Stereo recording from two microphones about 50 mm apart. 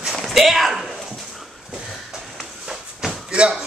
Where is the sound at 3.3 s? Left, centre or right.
Centre.